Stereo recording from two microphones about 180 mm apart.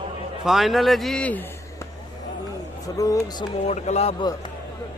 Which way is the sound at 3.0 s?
20° left (ahead or behind).